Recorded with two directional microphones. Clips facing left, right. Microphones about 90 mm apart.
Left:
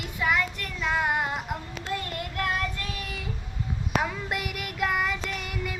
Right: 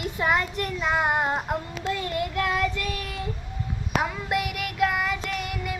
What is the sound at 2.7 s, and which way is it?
Child singing, 75° right (ahead or behind).